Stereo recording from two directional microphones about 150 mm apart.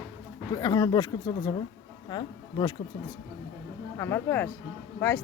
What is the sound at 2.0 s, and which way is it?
Speech, 30° left (ahead or behind).